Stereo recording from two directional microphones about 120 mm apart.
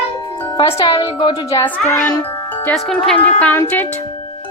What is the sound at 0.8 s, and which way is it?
Speech, 45° left (ahead or behind).